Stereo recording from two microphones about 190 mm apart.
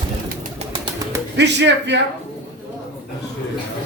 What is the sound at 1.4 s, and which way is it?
Speech, 65° right (ahead or behind).